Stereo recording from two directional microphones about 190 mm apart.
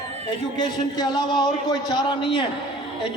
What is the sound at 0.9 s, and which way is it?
A man's voice, 20° left (ahead or behind).